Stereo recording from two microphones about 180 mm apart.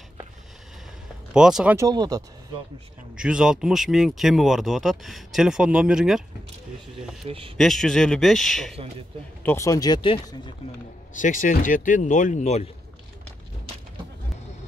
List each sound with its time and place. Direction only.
1.3 s speech: 5° right (ahead or behind)
1.8 s speech: 20° right (ahead or behind)
3.2 s speech: 5° right (ahead or behind)
7.2 s speech: 30° right (ahead or behind)
7.5 s speech: centre (ahead or behind)
9.4 s speech: 15° left (ahead or behind)
11.1 s speech: 45° left (ahead or behind)